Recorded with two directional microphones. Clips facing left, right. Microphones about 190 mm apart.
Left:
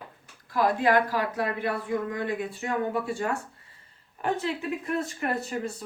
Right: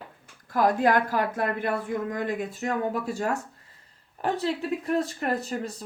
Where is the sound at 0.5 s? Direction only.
45° right (ahead or behind).